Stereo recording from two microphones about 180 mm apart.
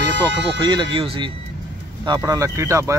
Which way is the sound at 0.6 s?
25° right (ahead or behind).